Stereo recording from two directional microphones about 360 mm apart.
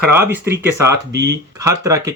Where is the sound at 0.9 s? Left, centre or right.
Right.